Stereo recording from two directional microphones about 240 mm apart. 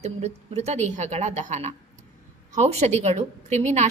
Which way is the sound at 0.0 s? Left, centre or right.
Right.